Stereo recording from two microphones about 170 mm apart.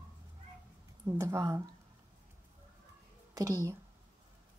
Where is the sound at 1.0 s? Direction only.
15° right (ahead or behind).